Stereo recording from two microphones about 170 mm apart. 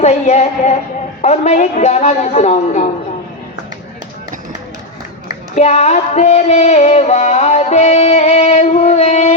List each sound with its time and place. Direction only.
0.0 s music: 40° left (ahead or behind)
5.5 s music: 40° left (ahead or behind)